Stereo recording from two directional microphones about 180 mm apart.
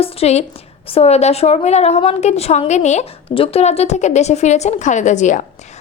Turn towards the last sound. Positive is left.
turn(degrees=45)  # may be behind; listen again after turning